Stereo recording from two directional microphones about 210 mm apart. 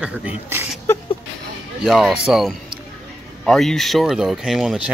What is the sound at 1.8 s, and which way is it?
Speech, centre (ahead or behind).